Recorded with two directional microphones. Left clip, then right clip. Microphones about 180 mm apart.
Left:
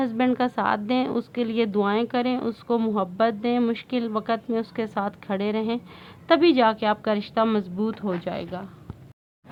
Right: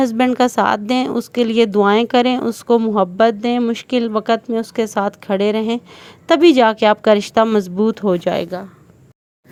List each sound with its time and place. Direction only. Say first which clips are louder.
0.0 s speech: right 9 dB; 45° right (ahead or behind)